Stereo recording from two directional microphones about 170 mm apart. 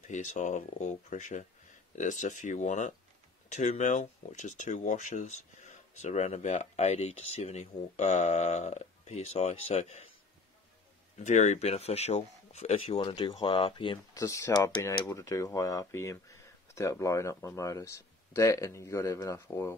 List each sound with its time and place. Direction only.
0.0 s speech: 45° left (ahead or behind)
11.1 s speech: 45° left (ahead or behind); by 19.7 s 15° left (ahead or behind)